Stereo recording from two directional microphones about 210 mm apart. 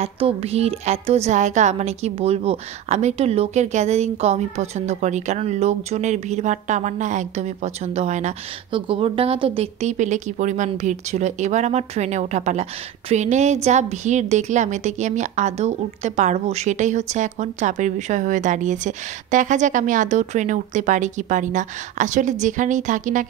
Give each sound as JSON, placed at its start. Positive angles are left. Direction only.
{"t": 0.0, "sound": "speech", "side_deg": -30}